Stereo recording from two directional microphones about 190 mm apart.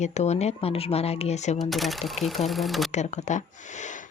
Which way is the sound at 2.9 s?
40° left (ahead or behind).